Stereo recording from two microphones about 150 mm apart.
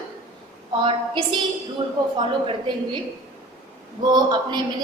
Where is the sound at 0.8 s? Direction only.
35° right (ahead or behind).